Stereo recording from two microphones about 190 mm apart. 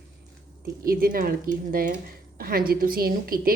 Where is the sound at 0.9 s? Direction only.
50° right (ahead or behind).